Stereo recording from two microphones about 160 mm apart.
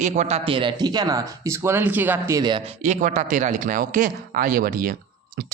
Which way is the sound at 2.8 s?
50° right (ahead or behind).